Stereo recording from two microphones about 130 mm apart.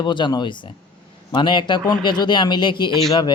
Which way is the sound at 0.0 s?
35° left (ahead or behind).